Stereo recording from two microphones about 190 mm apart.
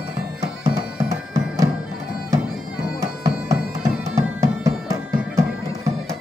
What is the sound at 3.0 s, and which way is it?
Music, 15° right (ahead or behind).